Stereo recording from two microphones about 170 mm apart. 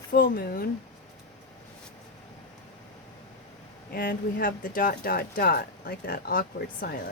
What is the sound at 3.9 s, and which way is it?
Speech, 55° left (ahead or behind).